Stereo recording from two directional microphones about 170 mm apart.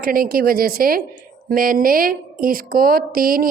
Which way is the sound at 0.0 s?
60° right (ahead or behind).